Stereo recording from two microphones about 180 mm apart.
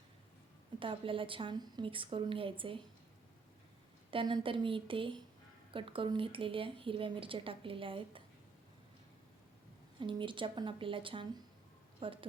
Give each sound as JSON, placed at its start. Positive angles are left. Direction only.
{"t": 0.8, "sound": "a woman's voice", "side_deg": -30}
{"t": 4.1, "sound": "a woman's voice", "side_deg": -30}
{"t": 10.0, "sound": "a woman's voice", "side_deg": -25}